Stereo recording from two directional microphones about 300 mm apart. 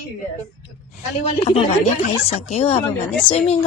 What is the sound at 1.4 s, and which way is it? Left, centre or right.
A woman's voice, centre.